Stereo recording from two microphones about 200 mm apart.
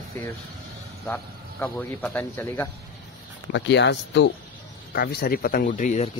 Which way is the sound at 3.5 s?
65° left (ahead or behind).